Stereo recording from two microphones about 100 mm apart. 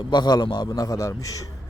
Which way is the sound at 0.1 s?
45° left (ahead or behind).